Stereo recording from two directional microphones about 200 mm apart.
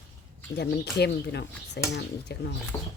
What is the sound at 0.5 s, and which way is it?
Speech, 55° left (ahead or behind).